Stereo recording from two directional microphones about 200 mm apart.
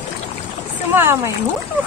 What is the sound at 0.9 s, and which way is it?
Speech, 10° right (ahead or behind).